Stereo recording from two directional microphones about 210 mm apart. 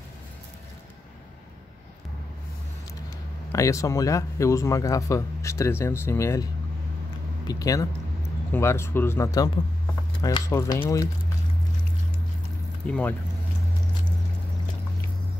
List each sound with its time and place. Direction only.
3.5 s speech: 15° left (ahead or behind)
7.4 s speech: 15° left (ahead or behind)
12.8 s speech: 5° left (ahead or behind)